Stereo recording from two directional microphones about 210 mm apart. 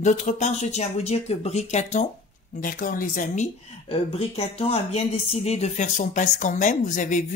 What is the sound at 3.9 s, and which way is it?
Mantra, 30° left (ahead or behind).